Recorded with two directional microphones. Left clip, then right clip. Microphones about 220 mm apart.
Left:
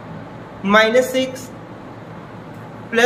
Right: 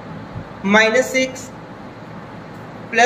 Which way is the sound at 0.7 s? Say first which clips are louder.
Left 1 dB; 20° left (ahead or behind).